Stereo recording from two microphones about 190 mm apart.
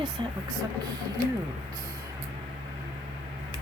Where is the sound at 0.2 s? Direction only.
25° right (ahead or behind).